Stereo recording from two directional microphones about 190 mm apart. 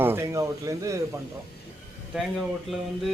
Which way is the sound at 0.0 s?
15° right (ahead or behind).